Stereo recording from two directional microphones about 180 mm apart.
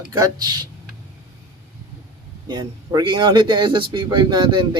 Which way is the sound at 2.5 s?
25° right (ahead or behind).